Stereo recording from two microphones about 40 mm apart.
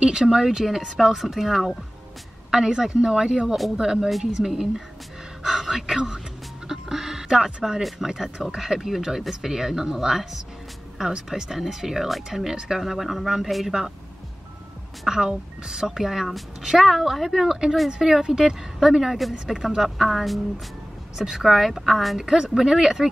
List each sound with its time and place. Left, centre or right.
0.0 s speech: centre
3.4 s speech: centre
3.7 s speech: centre
6.7 s a sound: centre
8.5 s speech: centre
15.0 s speech: centre
17.5 s speech: centre
19.7 s speech: centre
22.2 s speech: centre